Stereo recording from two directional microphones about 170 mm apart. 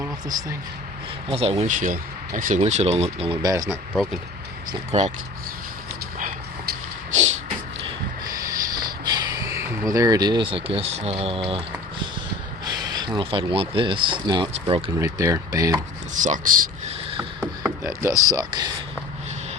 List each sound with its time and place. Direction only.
0.0 s speech: 20° right (ahead or behind)
1.3 s speech: 35° right (ahead or behind)
1.6 s speech: 50° right (ahead or behind)
2.6 s speech: 40° right (ahead or behind)
3.4 s speech: 20° right (ahead or behind)
3.9 s speech: centre (ahead or behind)
4.9 s speech: 40° right (ahead or behind)
6.1 s a sound: 55° right (ahead or behind)
8.4 s a sound: 25° right (ahead or behind)
12.6 s speech: 20° right (ahead or behind)
14.9 s speech: 15° right (ahead or behind)
16.1 s speech: 50° right (ahead or behind)
17.4 s a sound: 15° right (ahead or behind)